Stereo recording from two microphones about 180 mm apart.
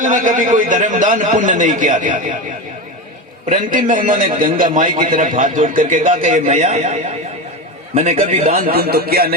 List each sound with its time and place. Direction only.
0.0 s a man's voice: 45° right (ahead or behind)
3.5 s a man's voice: 45° right (ahead or behind)
8.4 s a man's voice: 55° right (ahead or behind)